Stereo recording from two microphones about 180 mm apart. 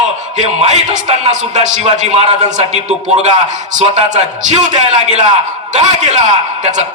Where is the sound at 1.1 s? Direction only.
40° right (ahead or behind).